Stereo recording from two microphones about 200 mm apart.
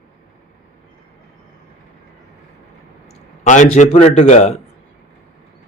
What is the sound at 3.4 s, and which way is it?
A man's voice, 35° left (ahead or behind).